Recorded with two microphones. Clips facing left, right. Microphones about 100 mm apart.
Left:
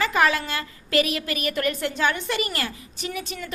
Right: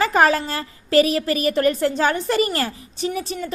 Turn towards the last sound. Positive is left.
turn(degrees=-35)  # may be behind; listen again after turning